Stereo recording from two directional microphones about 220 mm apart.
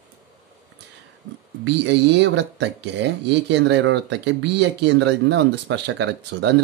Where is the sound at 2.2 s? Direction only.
55° right (ahead or behind).